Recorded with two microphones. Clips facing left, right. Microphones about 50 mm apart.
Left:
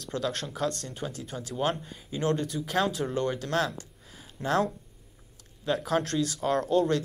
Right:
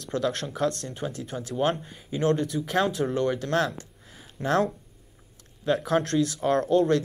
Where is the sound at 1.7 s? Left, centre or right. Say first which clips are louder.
Right 3 dB; centre.